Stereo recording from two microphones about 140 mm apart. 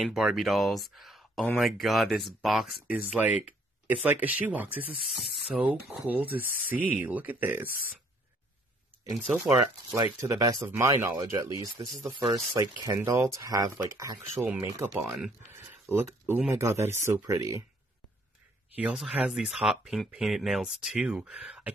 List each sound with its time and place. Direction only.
0.0 s speech: 5° right (ahead or behind)
9.3 s speech: 5° right (ahead or behind)
9.8 s speech: 25° right (ahead or behind)
14.4 s speech: 15° right (ahead or behind)
15.0 s speech: 5° right (ahead or behind)
15.5 s speech: 15° right (ahead or behind)
18.8 s speech: 5° right (ahead or behind)